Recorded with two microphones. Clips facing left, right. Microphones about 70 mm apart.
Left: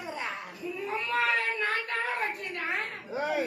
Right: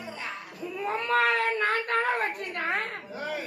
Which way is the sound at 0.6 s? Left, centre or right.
Right.